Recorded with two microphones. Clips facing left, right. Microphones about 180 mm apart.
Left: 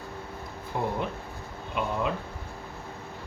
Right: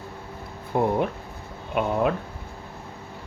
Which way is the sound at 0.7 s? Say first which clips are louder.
Right 7 dB; 55° right (ahead or behind).